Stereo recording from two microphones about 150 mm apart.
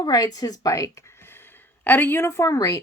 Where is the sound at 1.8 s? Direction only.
15° left (ahead or behind).